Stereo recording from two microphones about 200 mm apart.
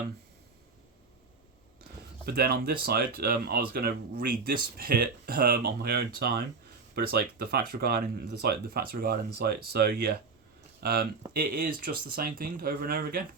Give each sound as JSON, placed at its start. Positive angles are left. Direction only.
{"t": 2.2, "sound": "speech", "side_deg": -50}